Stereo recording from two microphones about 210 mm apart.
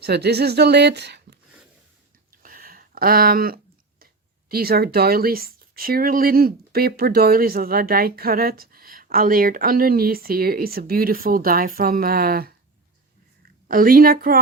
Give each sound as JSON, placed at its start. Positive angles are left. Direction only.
{"t": 0.0, "sound": "speech", "side_deg": -50}
{"t": 2.4, "sound": "a sound", "side_deg": -45}
{"t": 4.0, "sound": "speech", "side_deg": -45}
{"t": 13.7, "sound": "speech", "side_deg": -40}